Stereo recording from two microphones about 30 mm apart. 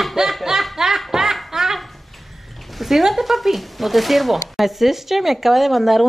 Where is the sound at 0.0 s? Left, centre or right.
Centre.